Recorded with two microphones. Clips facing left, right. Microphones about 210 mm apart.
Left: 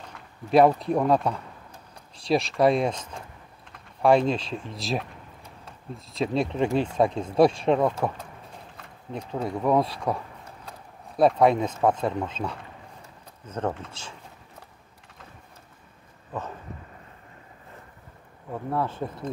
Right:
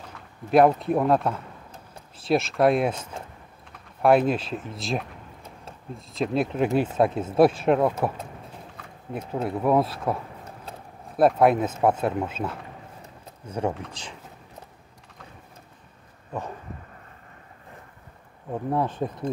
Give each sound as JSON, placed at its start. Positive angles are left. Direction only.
{"t": 0.5, "sound": "speech", "side_deg": 0}
{"t": 9.3, "sound": "speech", "side_deg": -5}
{"t": 18.5, "sound": "speech", "side_deg": -15}